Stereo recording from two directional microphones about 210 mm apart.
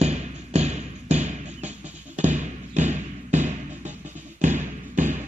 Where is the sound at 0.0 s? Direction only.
30° right (ahead or behind).